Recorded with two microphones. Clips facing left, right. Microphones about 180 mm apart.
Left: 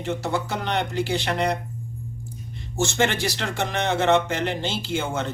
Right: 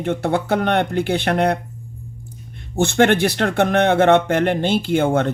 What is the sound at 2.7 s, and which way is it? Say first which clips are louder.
Speech: right 8 dB; 60° right (ahead or behind).